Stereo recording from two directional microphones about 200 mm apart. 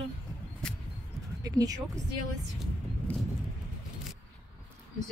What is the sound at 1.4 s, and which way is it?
Speech, 20° right (ahead or behind).